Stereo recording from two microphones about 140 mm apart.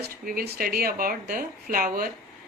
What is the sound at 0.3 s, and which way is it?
Speech, 90° right.